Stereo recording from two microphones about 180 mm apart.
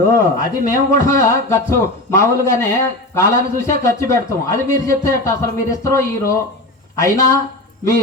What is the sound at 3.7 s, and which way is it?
A man's voice, 15° left (ahead or behind).